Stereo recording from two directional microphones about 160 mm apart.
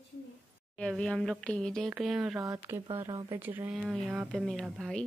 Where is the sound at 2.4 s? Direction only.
15° right (ahead or behind); by 5.0 s centre (ahead or behind).